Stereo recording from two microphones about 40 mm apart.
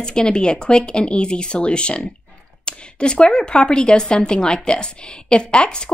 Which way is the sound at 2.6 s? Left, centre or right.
Left.